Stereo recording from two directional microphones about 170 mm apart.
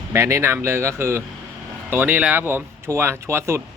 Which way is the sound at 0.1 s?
15° right (ahead or behind).